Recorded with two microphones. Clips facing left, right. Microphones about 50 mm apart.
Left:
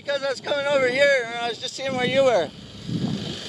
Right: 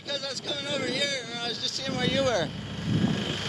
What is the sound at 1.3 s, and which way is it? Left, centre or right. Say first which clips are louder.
Speech: left 6 dB; centre.